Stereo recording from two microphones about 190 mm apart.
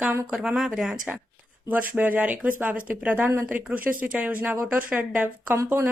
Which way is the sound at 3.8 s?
45° right (ahead or behind).